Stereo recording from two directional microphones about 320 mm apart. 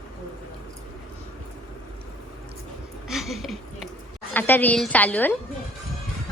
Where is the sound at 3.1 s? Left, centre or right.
Centre.